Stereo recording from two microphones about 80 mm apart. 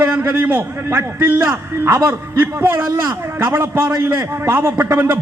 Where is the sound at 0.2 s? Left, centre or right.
Right.